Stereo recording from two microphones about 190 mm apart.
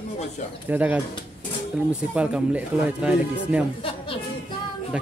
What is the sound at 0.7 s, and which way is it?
Speech, 10° right (ahead or behind).